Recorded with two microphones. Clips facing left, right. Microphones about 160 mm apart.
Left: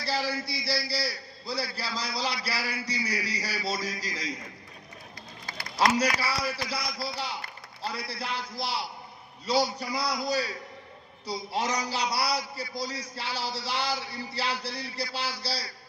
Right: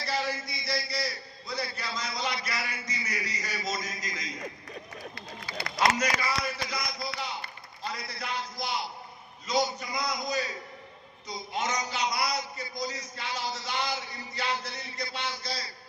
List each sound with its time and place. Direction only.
0.0 s a man's voice: 30° left (ahead or behind)
6.0 s a man's voice: 30° left (ahead or behind)